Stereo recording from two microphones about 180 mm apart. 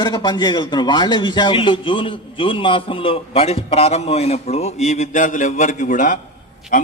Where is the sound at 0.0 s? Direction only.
25° left (ahead or behind).